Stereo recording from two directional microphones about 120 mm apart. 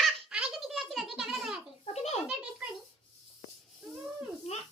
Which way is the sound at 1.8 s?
60° left (ahead or behind).